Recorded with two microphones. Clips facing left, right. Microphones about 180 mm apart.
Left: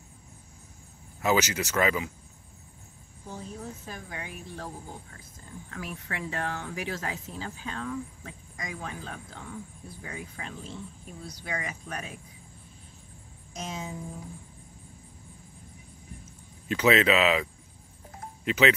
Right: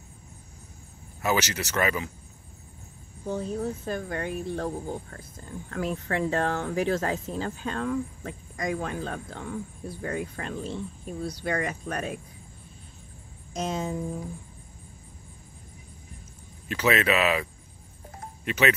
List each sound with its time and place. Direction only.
1.2 s speech: 15° left (ahead or behind)
3.3 s speech: 65° right (ahead or behind)
6.0 s speech: 45° right (ahead or behind)
13.5 s speech: 60° right (ahead or behind)
16.6 s speech: 20° left (ahead or behind)